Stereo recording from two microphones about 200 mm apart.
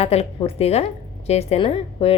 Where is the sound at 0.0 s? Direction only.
30° left (ahead or behind).